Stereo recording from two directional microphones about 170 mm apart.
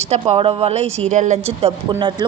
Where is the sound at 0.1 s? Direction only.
35° right (ahead or behind).